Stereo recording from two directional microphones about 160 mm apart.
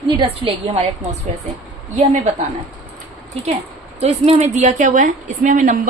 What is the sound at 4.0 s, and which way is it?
A woman's voice, 40° right (ahead or behind).